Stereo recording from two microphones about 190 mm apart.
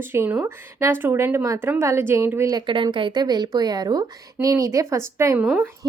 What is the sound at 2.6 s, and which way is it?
A woman's voice, 25° right (ahead or behind).